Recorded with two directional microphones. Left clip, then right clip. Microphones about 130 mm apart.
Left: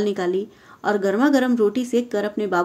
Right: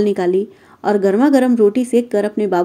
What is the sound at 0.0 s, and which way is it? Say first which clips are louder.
A woman's voice: right 6 dB; 45° right (ahead or behind).